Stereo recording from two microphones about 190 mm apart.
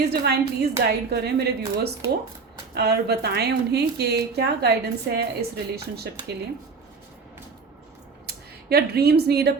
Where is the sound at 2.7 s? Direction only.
60° right (ahead or behind).